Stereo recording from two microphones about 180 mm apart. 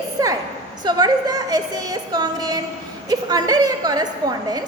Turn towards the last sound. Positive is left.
turn(degrees=-20)  # may be behind; listen again after turning